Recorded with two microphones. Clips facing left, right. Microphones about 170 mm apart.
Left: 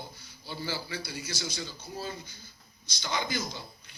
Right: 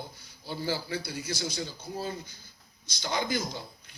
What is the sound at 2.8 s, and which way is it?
Speech, 50° right (ahead or behind).